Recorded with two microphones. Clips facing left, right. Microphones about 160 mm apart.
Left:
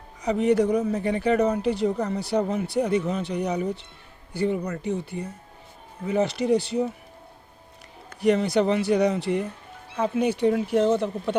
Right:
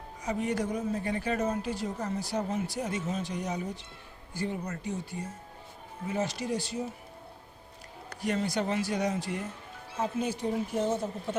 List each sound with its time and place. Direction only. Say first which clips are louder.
0.2 s speech: left 10 dB; 75° left (ahead or behind)
8.2 s speech: left 9 dB; 70° left (ahead or behind)